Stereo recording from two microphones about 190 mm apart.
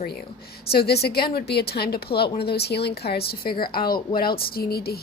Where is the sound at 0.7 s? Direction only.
55° left (ahead or behind).